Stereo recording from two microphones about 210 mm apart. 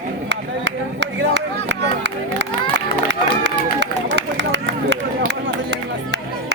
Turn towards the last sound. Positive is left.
turn(degrees=-55)  # may be behind; listen again after turning